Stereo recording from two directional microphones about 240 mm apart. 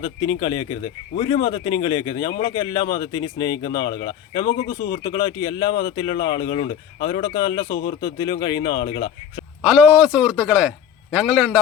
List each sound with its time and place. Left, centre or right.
0.0 s speech: centre
9.6 s a man's voice: centre